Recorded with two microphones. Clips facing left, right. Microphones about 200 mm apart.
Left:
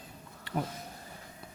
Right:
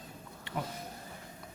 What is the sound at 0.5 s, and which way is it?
Speech, 30° left (ahead or behind).